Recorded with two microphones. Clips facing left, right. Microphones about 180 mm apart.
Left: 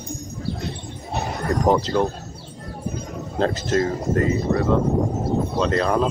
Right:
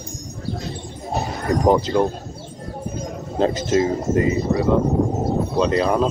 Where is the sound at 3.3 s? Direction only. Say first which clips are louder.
Right 3 dB; 5° right (ahead or behind).